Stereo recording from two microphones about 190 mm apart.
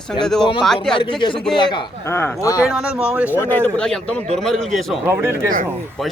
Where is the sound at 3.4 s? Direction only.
10° left (ahead or behind).